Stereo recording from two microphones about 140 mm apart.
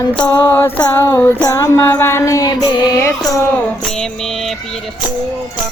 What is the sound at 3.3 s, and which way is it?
Music, 5° left (ahead or behind).